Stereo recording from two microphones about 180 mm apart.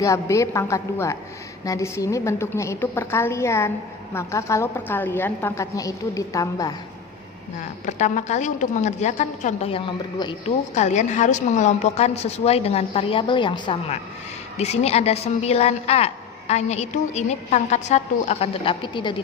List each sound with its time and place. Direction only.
0.0 s a woman's voice: 15° left (ahead or behind)
7.9 s a woman's voice: 40° left (ahead or behind)
10.8 s a woman's voice: 40° left (ahead or behind)